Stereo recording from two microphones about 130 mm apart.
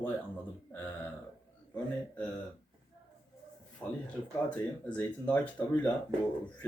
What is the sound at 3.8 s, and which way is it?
Speech, 10° left (ahead or behind).